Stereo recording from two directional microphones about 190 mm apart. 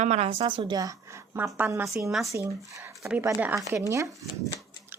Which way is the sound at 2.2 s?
15° right (ahead or behind).